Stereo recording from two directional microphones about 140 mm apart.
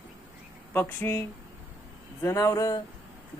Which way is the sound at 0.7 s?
15° left (ahead or behind).